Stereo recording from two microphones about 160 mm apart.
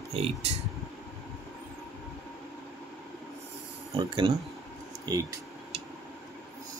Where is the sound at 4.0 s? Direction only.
35° right (ahead or behind).